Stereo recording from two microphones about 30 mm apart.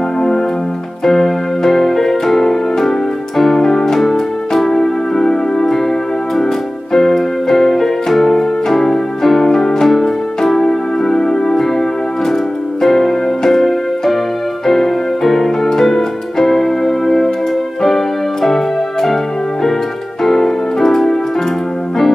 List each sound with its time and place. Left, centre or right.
1.0 s music: centre
6.9 s music: centre
12.8 s music: centre
20.2 s keyboard: centre